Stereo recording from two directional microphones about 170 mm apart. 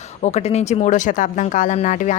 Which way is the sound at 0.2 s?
40° left (ahead or behind).